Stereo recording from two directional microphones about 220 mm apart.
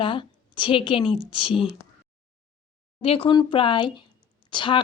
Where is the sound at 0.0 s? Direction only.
20° left (ahead or behind).